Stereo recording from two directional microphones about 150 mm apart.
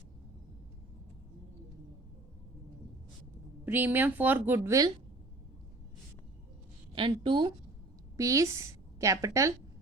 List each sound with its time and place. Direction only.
3.7 s a woman's voice: 15° right (ahead or behind)
6.9 s a woman's voice: 35° right (ahead or behind)
8.1 s a woman's voice: 20° right (ahead or behind)